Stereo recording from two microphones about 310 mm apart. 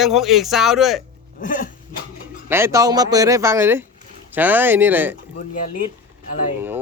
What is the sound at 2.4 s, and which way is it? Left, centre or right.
A man's voice, centre.